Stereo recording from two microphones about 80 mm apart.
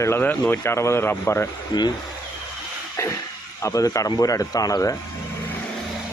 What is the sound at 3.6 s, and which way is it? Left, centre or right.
Speech, left.